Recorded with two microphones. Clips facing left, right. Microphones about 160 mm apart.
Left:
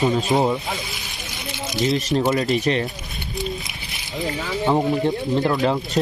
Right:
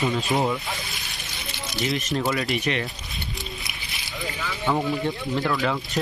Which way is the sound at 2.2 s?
40° left (ahead or behind).